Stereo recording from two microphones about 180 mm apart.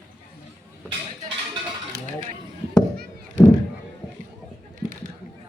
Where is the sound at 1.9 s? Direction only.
60° right (ahead or behind).